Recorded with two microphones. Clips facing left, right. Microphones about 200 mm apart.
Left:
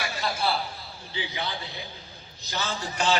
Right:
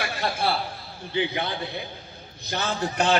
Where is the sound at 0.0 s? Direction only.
60° right (ahead or behind).